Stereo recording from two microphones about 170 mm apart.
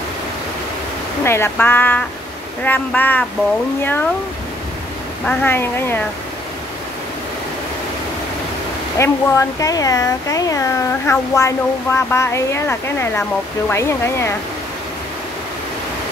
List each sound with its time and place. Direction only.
1.2 s speech: 15° left (ahead or behind)
5.2 s speech: 10° left (ahead or behind)
8.9 s speech: 15° left (ahead or behind)